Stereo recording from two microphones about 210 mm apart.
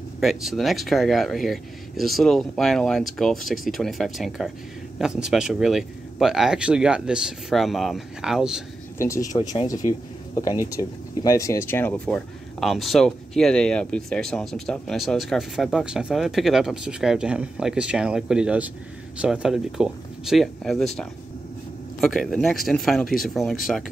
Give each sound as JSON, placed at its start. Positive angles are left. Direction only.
{"t": 0.2, "sound": "speech", "side_deg": 0}
{"t": 8.9, "sound": "speech", "side_deg": 15}